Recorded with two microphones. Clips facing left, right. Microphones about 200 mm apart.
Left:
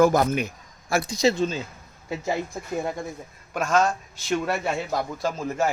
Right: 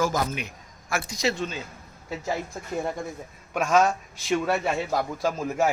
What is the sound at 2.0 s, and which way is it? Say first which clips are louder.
Speech: left 2 dB; 20° left (ahead or behind).